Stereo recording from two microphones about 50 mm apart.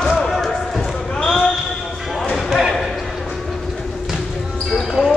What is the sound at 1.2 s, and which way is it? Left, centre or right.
Basketball bounce, centre.